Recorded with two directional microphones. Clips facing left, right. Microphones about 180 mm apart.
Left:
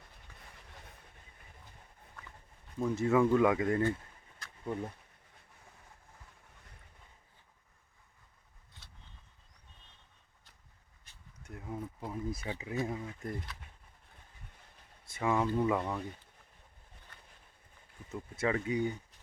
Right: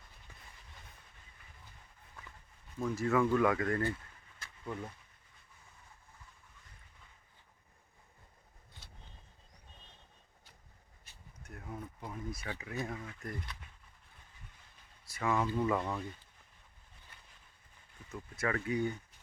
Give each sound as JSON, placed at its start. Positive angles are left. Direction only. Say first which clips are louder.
{"t": 2.7, "sound": "speech", "louder": "left 3 dB", "side_deg": 20}
{"t": 11.1, "sound": "a sound", "louder": "right 1 dB", "side_deg": -5}
{"t": 11.4, "sound": "a sound", "louder": "left 4 dB", "side_deg": 20}
{"t": 11.9, "sound": "speech", "louder": "left 4 dB", "side_deg": 25}
{"t": 15.0, "sound": "speech", "louder": "left 2 dB", "side_deg": 20}
{"t": 18.1, "sound": "speech", "louder": "left 3 dB", "side_deg": 25}